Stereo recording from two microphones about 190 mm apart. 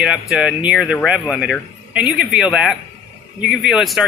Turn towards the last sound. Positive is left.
turn(degrees=0)  # may be behind; listen again after turning